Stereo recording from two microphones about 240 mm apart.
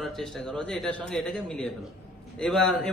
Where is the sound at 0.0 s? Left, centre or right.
Centre.